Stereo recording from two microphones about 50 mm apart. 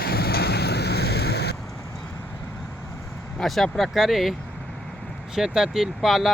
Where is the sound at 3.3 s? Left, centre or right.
Centre.